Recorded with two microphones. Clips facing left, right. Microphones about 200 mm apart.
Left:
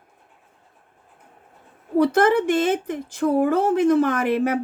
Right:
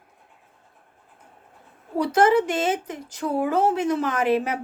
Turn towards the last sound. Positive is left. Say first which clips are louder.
# left 2 dB
turn(degrees=55)  # may be behind; listen again after turning